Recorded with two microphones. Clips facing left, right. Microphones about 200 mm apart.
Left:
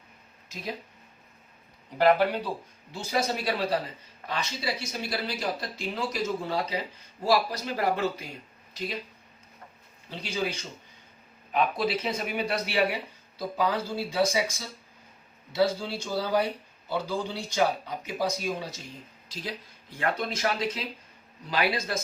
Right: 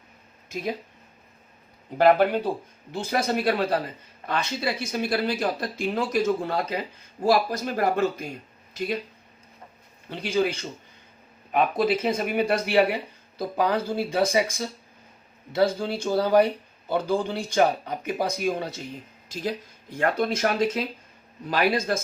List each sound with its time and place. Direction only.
2.0 s speech: 50° right (ahead or behind)
10.1 s speech: 55° right (ahead or behind)
15.5 s speech: 55° right (ahead or behind)